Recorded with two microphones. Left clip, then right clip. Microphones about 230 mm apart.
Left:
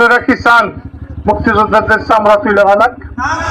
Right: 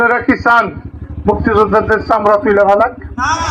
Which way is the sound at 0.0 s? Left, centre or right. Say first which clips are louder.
Left 3 dB; left.